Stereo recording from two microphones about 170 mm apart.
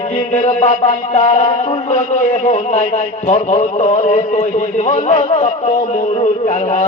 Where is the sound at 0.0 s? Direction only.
40° left (ahead or behind).